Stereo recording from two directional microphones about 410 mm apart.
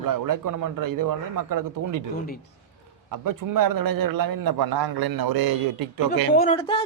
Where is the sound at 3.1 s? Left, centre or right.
Right.